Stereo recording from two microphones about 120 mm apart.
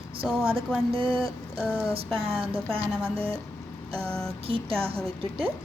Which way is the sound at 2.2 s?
55° right (ahead or behind).